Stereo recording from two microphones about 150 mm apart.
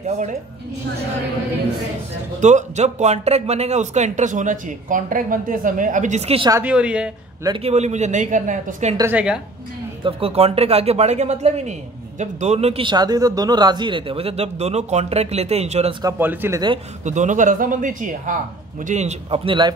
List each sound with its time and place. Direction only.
2.4 s a man's voice: 50° right (ahead or behind)
6.6 s speech: 5° right (ahead or behind)
7.6 s a man's voice: 50° right (ahead or behind)
9.1 s speech: 5° right (ahead or behind)
10.0 s a man's voice: 40° right (ahead or behind)
16.2 s speech: 15° right (ahead or behind)
17.0 s a man's voice: 55° right (ahead or behind); by 19.7 s 35° right (ahead or behind)